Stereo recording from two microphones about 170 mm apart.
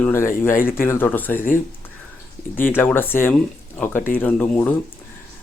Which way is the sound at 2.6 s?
10° left (ahead or behind).